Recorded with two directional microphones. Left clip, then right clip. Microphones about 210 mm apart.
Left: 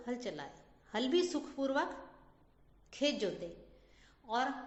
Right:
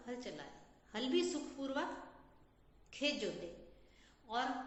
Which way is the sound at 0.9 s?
50° left (ahead or behind).